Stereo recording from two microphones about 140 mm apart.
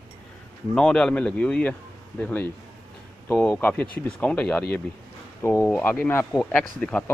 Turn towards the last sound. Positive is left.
turn(degrees=10)  # may be behind; listen again after turning